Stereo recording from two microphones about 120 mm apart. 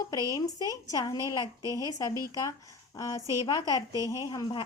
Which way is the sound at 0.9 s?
30° left (ahead or behind).